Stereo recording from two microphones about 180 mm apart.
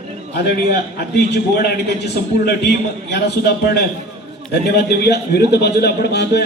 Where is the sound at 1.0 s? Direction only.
65° left (ahead or behind).